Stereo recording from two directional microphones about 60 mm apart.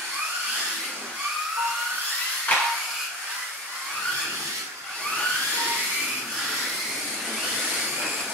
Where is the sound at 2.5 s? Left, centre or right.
Left.